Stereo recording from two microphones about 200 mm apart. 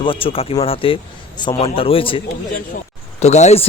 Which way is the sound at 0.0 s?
25° left (ahead or behind).